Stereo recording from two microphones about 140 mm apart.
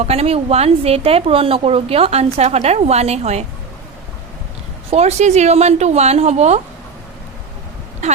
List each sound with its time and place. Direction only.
0.0 s speech: 50° right (ahead or behind)
4.9 s speech: 50° right (ahead or behind)
8.0 s a sound: 50° right (ahead or behind)